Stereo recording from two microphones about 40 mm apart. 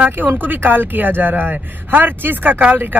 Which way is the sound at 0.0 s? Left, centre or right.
Right.